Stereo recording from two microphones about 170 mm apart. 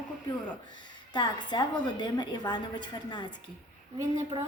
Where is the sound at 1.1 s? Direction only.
25° left (ahead or behind).